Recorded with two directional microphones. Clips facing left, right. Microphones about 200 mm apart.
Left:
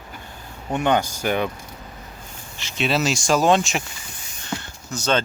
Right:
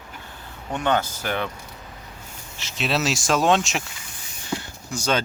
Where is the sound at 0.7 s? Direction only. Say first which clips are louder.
Left 3 dB; 15° left (ahead or behind).